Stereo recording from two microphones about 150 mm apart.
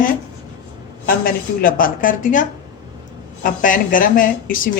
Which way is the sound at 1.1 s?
70° left (ahead or behind).